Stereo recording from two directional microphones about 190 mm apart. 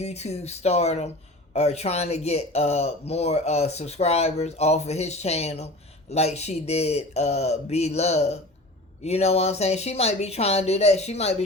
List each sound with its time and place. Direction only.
0.0 s speech: 35° left (ahead or behind)